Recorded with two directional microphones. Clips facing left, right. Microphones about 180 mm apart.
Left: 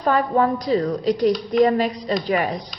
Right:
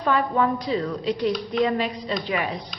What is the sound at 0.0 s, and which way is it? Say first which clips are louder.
A woman's voice: left 3 dB; 40° left (ahead or behind).